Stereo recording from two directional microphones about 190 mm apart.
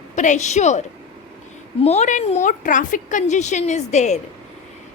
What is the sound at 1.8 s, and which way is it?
A woman's voice, 35° left (ahead or behind).